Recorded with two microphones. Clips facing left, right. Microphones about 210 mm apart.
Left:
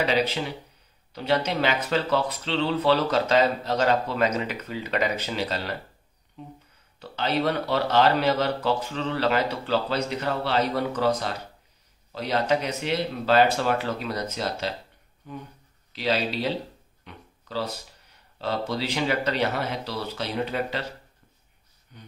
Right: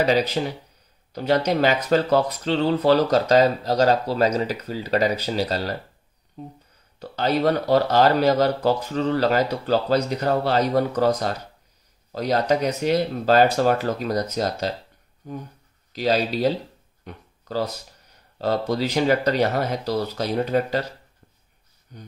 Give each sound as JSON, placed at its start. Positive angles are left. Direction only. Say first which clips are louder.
{"t": 0.0, "sound": "speech", "louder": "right 4 dB", "side_deg": -40}
{"t": 17.0, "sound": "a sound", "louder": "right 6 dB", "side_deg": -45}
{"t": 18.7, "sound": "speech", "louder": "right 7 dB", "side_deg": -45}
{"t": 21.9, "sound": "speech", "louder": "right 5 dB", "side_deg": -40}